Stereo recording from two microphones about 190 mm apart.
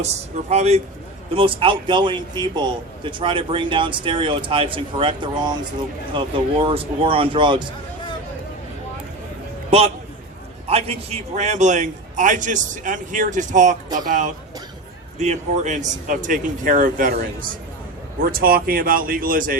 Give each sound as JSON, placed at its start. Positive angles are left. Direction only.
{"t": 0.0, "sound": "a man's voice", "side_deg": -35}
{"t": 9.6, "sound": "a man's voice", "side_deg": -30}